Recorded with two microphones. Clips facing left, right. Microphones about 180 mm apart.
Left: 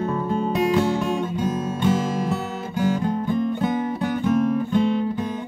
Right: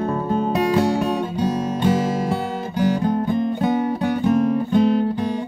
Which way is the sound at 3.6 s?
35° right (ahead or behind).